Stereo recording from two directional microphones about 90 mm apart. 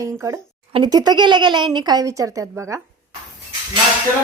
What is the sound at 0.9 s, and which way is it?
Speech, 50° right (ahead or behind).